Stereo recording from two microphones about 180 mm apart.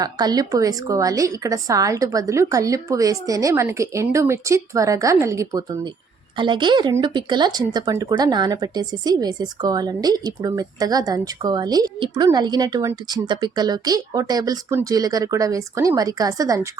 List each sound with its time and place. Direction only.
0.0 s a woman's voice: 20° right (ahead or behind)